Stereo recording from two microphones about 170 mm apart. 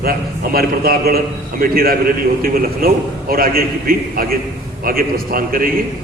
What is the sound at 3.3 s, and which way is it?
A man's voice, 60° right (ahead or behind).